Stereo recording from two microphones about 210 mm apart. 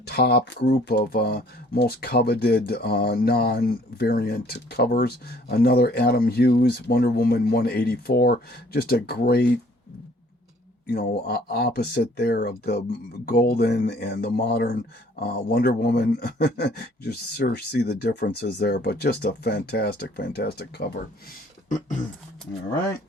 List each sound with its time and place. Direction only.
0.0 s speech: 50° left (ahead or behind)
10.8 s speech: 50° left (ahead or behind)
21.7 s a sound: 35° left (ahead or behind)